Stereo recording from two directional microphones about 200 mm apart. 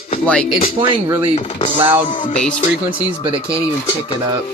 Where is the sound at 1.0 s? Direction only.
15° right (ahead or behind).